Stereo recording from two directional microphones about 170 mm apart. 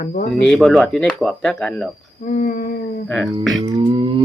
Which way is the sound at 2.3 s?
50° left (ahead or behind).